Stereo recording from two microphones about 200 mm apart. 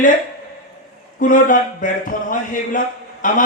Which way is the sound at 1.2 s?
40° left (ahead or behind).